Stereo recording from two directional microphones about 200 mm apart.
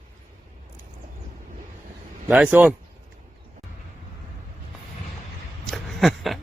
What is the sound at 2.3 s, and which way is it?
Speech, 10° right (ahead or behind).